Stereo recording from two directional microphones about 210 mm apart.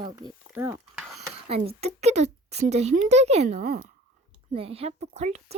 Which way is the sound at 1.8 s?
30° right (ahead or behind).